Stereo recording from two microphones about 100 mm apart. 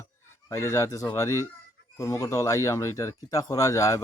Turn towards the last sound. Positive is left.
turn(degrees=30)  # may be behind; listen again after turning